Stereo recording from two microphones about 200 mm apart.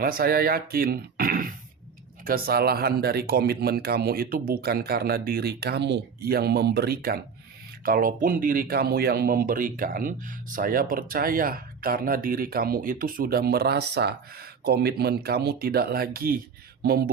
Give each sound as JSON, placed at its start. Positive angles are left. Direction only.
{"t": 0.0, "sound": "speech", "side_deg": -45}